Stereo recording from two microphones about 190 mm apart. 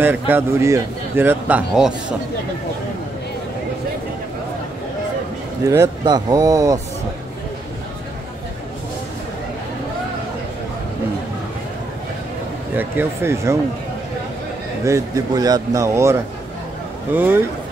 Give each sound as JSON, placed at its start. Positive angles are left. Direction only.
{"t": 0.0, "sound": "a man's voice", "side_deg": -10}
{"t": 5.7, "sound": "a man's voice", "side_deg": -20}
{"t": 12.7, "sound": "a man's voice", "side_deg": -10}
{"t": 14.9, "sound": "a man's voice", "side_deg": -15}